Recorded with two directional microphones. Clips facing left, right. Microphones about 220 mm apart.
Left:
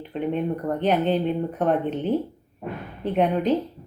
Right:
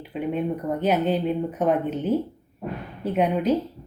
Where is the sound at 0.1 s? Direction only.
5° right (ahead or behind).